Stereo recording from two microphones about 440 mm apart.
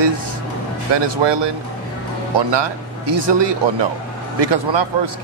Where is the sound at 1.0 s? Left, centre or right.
Right.